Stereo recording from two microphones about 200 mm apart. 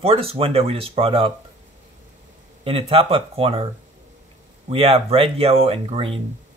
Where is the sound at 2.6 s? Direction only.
30° right (ahead or behind).